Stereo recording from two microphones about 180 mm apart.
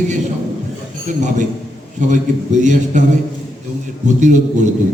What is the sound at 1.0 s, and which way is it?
A man's voice, 40° right (ahead or behind).